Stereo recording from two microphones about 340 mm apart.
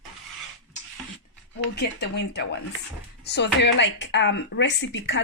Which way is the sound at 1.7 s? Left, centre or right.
Left.